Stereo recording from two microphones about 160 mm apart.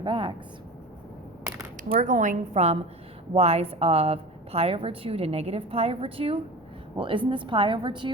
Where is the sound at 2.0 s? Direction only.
50° right (ahead or behind).